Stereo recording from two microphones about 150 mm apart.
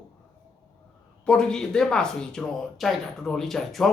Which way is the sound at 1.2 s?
5° left (ahead or behind).